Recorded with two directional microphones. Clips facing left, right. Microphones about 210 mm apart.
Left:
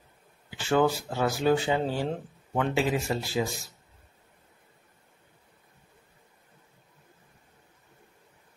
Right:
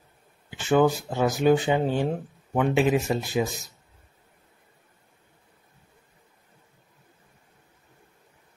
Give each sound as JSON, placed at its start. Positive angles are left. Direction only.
{"t": 0.5, "sound": "speech", "side_deg": -20}